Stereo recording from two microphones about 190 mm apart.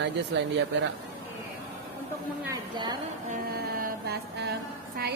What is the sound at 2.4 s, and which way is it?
Speech, 20° right (ahead or behind).